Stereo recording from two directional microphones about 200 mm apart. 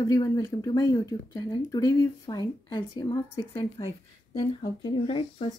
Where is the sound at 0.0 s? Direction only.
15° left (ahead or behind).